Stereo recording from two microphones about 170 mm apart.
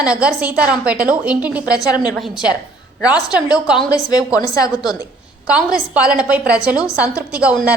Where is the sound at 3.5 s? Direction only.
5° right (ahead or behind).